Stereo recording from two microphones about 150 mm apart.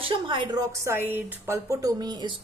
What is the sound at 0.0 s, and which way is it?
A woman's voice, 35° right (ahead or behind).